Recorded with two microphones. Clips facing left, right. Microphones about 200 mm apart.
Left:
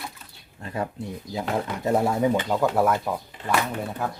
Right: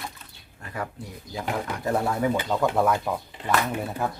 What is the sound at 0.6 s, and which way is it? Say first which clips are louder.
Speech: left 4 dB; 25° left (ahead or behind).